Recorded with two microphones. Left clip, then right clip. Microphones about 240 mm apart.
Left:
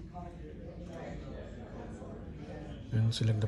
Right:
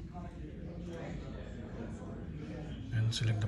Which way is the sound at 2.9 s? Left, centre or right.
Left.